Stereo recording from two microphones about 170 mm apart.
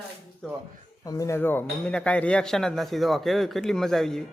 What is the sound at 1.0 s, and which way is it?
Speech, 20° left (ahead or behind).